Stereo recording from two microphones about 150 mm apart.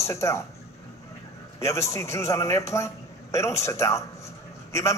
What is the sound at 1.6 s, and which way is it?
A man's voice, 20° left (ahead or behind).